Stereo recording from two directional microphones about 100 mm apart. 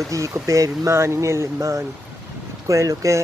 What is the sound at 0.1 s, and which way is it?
Speech, 35° right (ahead or behind).